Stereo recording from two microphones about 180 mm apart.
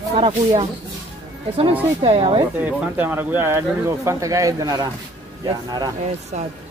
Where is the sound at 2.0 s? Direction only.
35° right (ahead or behind).